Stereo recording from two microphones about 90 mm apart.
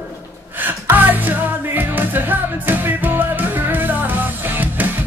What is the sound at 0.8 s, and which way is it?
Music, 20° right (ahead or behind).